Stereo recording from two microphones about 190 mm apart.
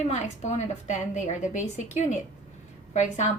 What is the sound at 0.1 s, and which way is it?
Speech, 40° left (ahead or behind).